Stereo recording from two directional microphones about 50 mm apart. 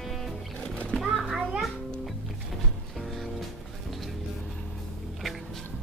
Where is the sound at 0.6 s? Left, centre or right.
Left.